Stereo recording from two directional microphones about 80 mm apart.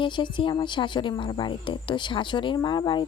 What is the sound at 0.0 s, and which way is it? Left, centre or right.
A woman's voice, left.